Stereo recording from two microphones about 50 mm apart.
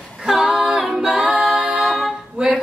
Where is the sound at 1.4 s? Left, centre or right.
Centre.